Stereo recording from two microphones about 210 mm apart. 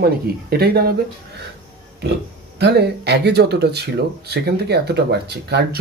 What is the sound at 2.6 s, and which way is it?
Speech, 50° right (ahead or behind).